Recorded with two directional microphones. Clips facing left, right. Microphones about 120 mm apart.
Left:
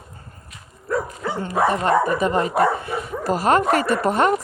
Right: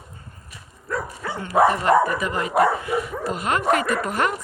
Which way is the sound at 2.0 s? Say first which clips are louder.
Left 4 dB; 25° left (ahead or behind).